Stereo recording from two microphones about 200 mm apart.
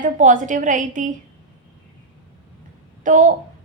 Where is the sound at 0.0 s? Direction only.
40° right (ahead or behind).